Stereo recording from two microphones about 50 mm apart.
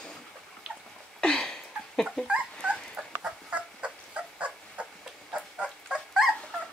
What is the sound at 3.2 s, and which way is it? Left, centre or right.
Dog, right.